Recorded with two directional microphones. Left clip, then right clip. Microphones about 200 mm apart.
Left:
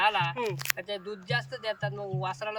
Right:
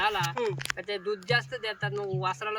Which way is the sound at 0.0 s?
5° left (ahead or behind).